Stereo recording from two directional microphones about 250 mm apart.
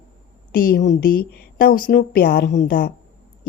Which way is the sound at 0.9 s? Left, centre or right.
Left.